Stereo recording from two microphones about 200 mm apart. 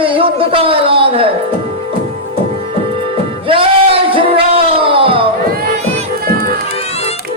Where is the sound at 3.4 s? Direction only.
25° right (ahead or behind).